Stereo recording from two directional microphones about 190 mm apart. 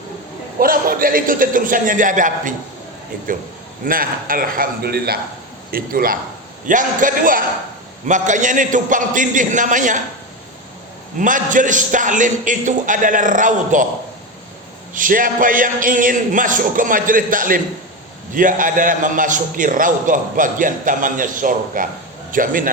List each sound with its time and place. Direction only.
0.6 s a man's voice: 50° right (ahead or behind)
3.8 s a man's voice: 50° right (ahead or behind)
11.2 s a man's voice: 45° right (ahead or behind)
14.9 s a man's voice: 45° right (ahead or behind)